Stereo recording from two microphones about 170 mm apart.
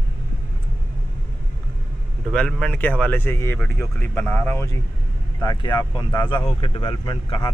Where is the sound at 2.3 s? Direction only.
5° left (ahead or behind).